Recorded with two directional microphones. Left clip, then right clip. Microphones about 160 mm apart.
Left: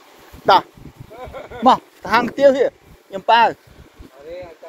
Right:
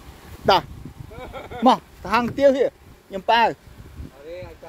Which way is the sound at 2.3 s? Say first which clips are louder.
Left 3 dB; 10° right (ahead or behind).